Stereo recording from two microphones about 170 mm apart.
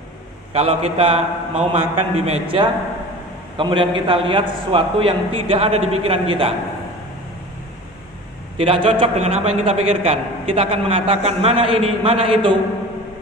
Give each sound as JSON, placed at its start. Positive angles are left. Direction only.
{"t": 0.5, "sound": "a man's voice", "side_deg": -35}
{"t": 8.5, "sound": "a man's voice", "side_deg": -35}